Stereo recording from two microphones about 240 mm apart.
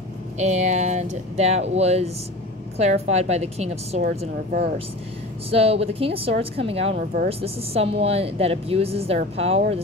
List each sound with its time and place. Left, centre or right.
0.4 s a woman's voice: right